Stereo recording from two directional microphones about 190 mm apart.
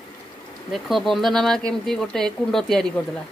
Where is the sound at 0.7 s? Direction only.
Centre (ahead or behind).